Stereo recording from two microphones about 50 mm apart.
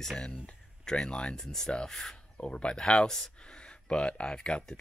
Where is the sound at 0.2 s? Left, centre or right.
Centre.